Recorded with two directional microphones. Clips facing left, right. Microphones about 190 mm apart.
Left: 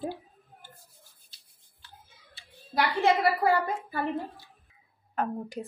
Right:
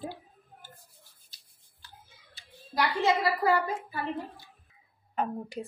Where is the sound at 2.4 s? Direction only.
40° right (ahead or behind).